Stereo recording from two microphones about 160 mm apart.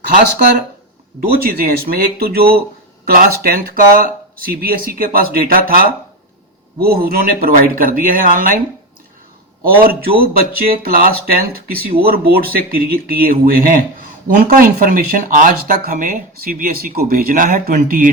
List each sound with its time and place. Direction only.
1.2 s speech: 65° right (ahead or behind)
9.8 s speech: 70° right (ahead or behind)